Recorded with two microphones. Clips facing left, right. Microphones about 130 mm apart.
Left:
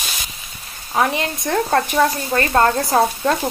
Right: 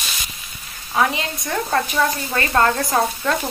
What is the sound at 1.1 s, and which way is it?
Speech, 50° left (ahead or behind).